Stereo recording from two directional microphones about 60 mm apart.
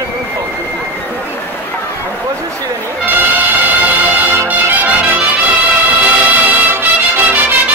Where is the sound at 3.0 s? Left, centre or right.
Right.